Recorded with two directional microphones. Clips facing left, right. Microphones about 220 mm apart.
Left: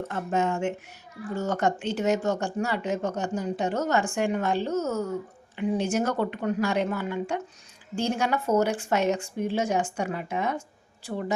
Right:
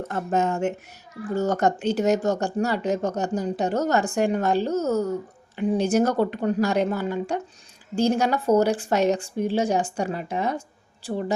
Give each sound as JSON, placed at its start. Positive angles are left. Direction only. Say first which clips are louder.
{"t": 0.1, "sound": "speech", "louder": "right 3 dB", "side_deg": -40}